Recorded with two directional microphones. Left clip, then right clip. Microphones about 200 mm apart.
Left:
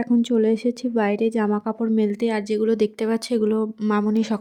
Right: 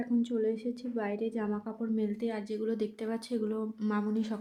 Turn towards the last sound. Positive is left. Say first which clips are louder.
# left 12 dB
turn(degrees=45)  # may be behind; listen again after turning